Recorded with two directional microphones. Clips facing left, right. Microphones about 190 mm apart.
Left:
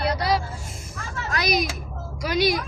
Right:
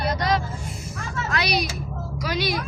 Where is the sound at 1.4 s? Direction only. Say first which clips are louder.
Left 1 dB; 45° left (ahead or behind).